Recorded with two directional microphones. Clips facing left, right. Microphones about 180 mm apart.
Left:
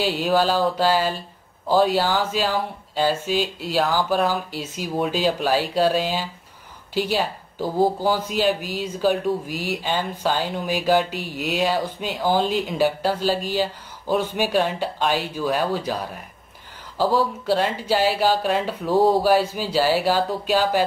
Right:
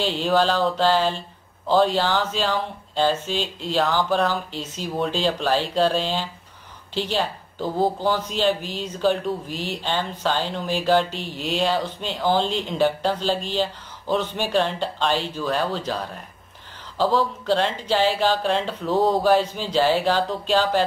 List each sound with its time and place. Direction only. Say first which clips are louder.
0.0 s speech: even; 5° left (ahead or behind)